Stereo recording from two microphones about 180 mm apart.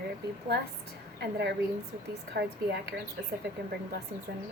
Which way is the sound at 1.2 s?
65° right (ahead or behind).